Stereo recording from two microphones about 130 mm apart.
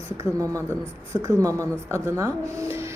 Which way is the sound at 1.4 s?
25° right (ahead or behind).